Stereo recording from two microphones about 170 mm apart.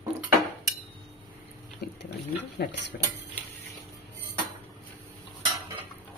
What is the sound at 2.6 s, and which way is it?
Speech, 90° left.